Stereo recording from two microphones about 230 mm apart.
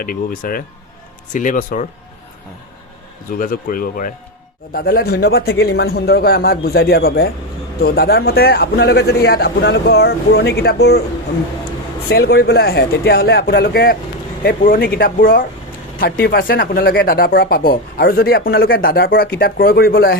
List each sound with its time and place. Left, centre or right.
0.0 s speech: left
3.3 s speech: left
12.0 s speech: left